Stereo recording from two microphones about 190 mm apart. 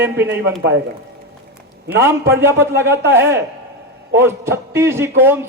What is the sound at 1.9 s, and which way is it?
A man's voice, 15° right (ahead or behind).